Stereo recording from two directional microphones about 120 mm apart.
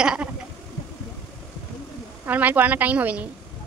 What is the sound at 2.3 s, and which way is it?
A woman's voice, 15° right (ahead or behind).